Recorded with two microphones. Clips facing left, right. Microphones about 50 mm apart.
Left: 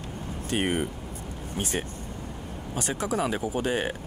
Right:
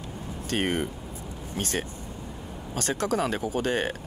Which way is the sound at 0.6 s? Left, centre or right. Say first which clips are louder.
Even; centre.